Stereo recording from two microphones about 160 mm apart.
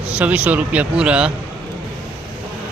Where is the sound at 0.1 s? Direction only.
10° right (ahead or behind).